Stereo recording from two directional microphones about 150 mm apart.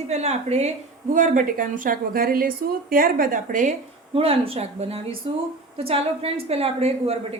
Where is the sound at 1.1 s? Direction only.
60° right (ahead or behind).